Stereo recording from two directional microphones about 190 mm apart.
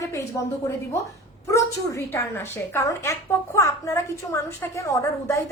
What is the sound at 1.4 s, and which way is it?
A woman's voice, 15° left (ahead or behind).